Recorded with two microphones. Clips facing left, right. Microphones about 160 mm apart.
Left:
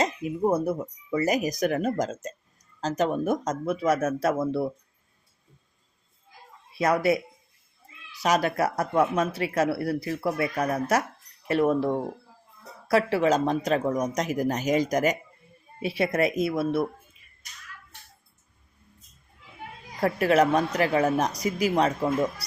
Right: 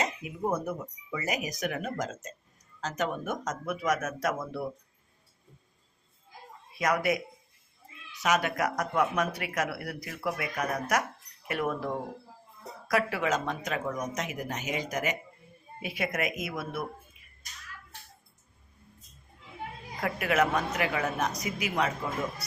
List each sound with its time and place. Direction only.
0.5 s a woman's voice: 35° left (ahead or behind)
6.7 s speech: 30° left (ahead or behind)
8.2 s speech: 35° left (ahead or behind)
12.9 s a woman's voice: 30° left (ahead or behind)
20.0 s a woman's voice: 35° left (ahead or behind)